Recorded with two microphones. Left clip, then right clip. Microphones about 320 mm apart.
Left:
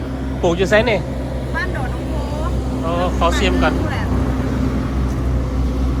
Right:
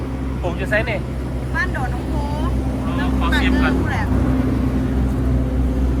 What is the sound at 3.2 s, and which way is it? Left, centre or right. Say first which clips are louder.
Speech: left 2 dB; centre.